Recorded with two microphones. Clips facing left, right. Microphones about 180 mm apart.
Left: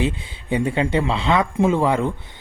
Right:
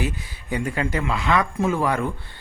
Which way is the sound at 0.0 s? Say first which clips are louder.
Left 5 dB; 25° left (ahead or behind).